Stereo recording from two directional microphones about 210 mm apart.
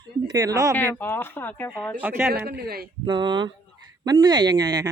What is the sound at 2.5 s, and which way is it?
Speech, 50° right (ahead or behind).